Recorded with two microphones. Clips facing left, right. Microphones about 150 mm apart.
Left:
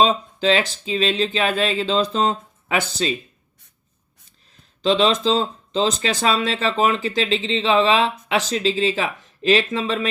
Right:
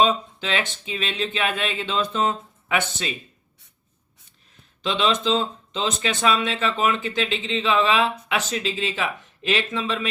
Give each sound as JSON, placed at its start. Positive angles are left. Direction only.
{"t": 0.0, "sound": "speech", "side_deg": 35}
{"t": 4.8, "sound": "speech", "side_deg": 35}